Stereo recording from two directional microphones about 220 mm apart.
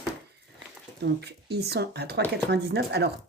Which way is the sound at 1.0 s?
50° right (ahead or behind).